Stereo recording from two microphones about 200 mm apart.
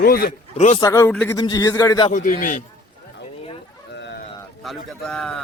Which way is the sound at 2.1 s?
40° left (ahead or behind).